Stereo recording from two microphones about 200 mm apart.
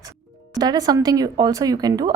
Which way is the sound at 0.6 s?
20° right (ahead or behind).